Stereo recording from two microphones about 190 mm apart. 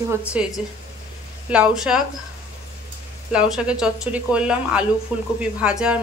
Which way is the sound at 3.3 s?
5° right (ahead or behind).